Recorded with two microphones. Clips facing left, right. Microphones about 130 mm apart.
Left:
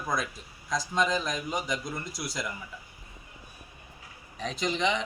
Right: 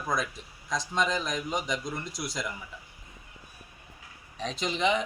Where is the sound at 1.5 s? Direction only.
20° right (ahead or behind).